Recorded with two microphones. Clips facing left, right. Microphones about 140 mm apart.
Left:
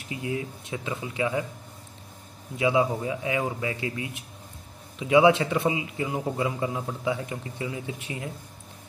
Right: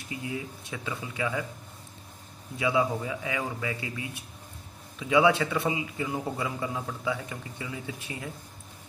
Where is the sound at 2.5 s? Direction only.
20° left (ahead or behind).